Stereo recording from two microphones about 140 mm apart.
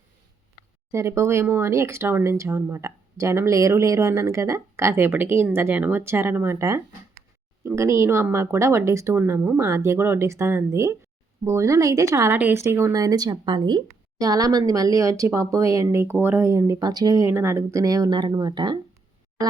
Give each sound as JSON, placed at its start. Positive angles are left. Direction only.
{"t": 0.9, "sound": "speech", "side_deg": -20}